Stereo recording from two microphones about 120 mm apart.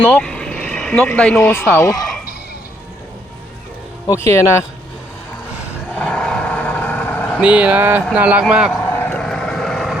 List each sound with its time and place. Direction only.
0.0 s speech: 10° left (ahead or behind); by 2.0 s 25° left (ahead or behind)
4.0 s speech: 25° left (ahead or behind)
6.0 s vehicle: 5° left (ahead or behind)
7.4 s speech: 10° right (ahead or behind)
8.8 s vehicle: 15° left (ahead or behind)
9.2 s vehicle: 5° left (ahead or behind)